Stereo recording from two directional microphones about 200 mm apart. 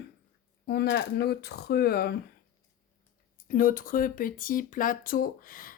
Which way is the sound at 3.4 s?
45° left (ahead or behind).